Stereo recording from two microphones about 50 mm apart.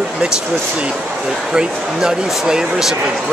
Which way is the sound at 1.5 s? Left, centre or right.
Centre.